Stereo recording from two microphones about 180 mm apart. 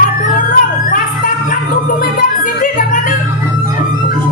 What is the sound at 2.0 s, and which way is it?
Music, 50° left (ahead or behind).